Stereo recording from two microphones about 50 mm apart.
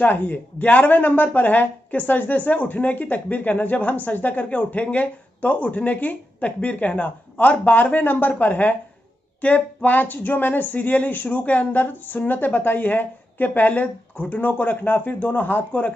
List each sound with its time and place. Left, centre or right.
0.0 s speech: left